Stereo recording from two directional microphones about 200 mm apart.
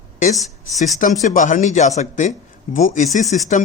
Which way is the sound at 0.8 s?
40° left (ahead or behind).